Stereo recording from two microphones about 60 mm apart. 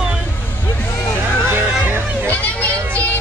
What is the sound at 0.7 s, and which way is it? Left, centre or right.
Vehicle, left.